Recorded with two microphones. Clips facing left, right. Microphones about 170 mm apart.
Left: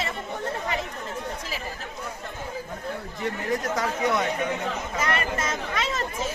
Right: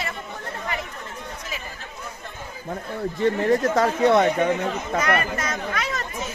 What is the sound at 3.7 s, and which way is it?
Speech, 65° right (ahead or behind).